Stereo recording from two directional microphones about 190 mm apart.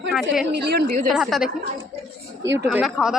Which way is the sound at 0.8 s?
45° right (ahead or behind).